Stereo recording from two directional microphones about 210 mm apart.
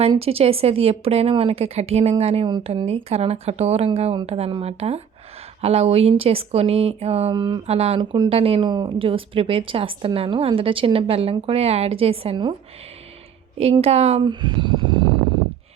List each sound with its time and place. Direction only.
0.0 s speech: 30° right (ahead or behind)
13.6 s speech: 30° right (ahead or behind)